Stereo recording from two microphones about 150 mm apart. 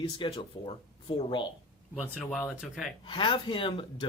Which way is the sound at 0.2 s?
35° left (ahead or behind).